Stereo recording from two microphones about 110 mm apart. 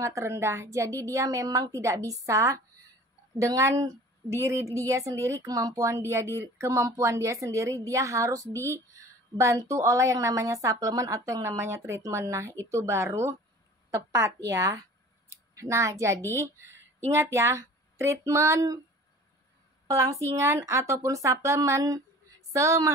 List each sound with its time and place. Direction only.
0.0 s speech: 25° right (ahead or behind)
19.9 s speech: 30° right (ahead or behind)